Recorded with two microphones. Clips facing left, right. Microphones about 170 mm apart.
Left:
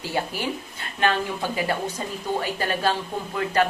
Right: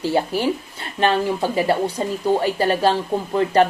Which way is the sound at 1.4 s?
40° right (ahead or behind).